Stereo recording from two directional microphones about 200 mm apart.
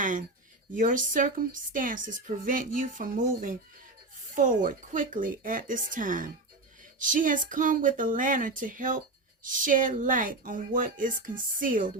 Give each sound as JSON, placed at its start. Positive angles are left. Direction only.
{"t": 0.0, "sound": "a woman's voice", "side_deg": -40}